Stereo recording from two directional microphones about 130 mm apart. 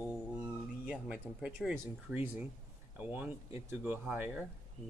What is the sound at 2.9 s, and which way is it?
Speech, 15° right (ahead or behind).